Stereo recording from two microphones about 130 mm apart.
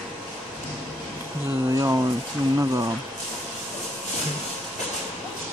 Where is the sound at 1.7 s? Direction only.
25° right (ahead or behind).